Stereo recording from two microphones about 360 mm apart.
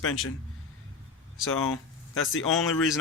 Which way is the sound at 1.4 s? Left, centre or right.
Left.